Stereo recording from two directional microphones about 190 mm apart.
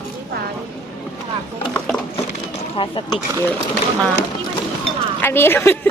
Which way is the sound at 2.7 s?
25° left (ahead or behind).